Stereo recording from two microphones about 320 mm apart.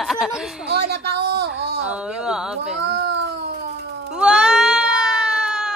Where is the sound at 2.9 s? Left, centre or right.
Right.